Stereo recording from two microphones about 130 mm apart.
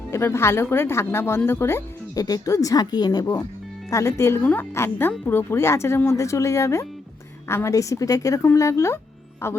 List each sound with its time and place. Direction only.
0.1 s speech: 20° left (ahead or behind)